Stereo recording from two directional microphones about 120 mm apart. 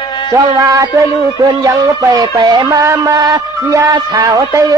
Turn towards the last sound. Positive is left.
turn(degrees=-25)  # may be behind; listen again after turning